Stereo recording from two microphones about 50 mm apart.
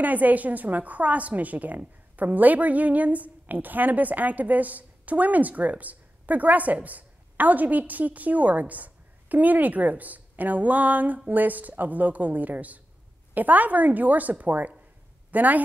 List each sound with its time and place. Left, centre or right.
0.0 s a woman's voice: right